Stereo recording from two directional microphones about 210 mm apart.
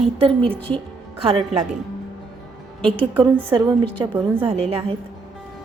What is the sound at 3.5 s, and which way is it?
A woman's voice, 20° right (ahead or behind).